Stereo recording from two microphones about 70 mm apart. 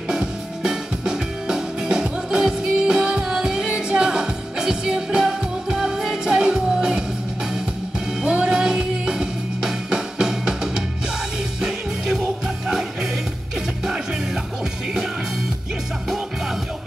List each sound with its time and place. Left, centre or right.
0.1 s music: centre
8.2 s music: centre
12.6 s music: centre